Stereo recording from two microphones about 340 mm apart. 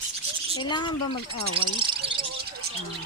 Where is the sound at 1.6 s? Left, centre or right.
Centre.